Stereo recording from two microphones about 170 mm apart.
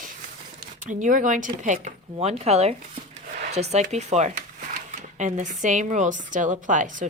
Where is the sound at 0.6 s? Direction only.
50° right (ahead or behind).